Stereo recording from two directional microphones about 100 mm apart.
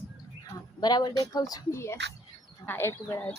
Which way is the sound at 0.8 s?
45° left (ahead or behind).